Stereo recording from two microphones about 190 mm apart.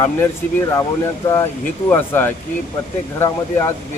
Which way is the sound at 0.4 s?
10° left (ahead or behind).